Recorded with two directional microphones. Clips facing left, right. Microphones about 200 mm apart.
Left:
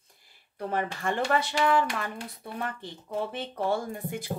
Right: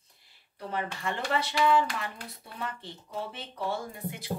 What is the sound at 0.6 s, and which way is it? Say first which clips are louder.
Speech: left 4 dB; 50° left (ahead or behind).